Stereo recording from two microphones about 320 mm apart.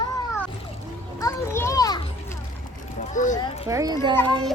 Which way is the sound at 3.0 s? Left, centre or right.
Left.